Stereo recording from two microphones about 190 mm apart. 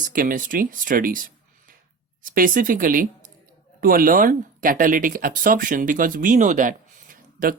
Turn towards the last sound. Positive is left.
turn(degrees=-45)  # may be behind; listen again after turning